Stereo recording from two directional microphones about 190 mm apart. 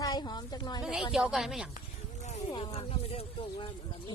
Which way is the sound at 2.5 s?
30° left (ahead or behind).